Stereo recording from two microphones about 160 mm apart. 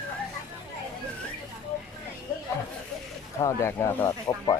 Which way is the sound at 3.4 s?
20° left (ahead or behind).